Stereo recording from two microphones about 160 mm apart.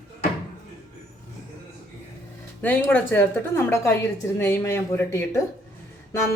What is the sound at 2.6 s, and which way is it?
A woman's voice, 10° left (ahead or behind).